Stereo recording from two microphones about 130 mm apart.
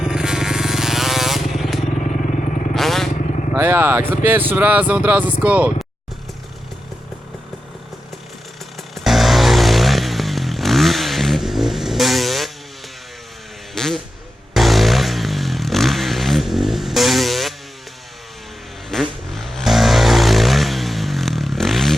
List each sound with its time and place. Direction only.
0.0 s motorcycle: 5° right (ahead or behind)
3.5 s speech: 15° right (ahead or behind)
9.0 s vehicle: centre (ahead or behind)
13.7 s a sound: 5° left (ahead or behind)
14.5 s vehicle: centre (ahead or behind)
18.9 s vehicle: centre (ahead or behind)